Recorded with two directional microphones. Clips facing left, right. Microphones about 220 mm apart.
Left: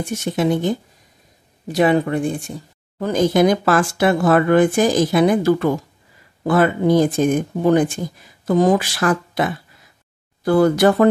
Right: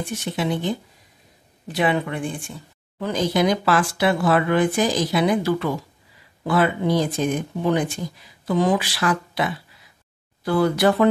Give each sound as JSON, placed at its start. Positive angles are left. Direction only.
{"t": 0.0, "sound": "speech", "side_deg": 45}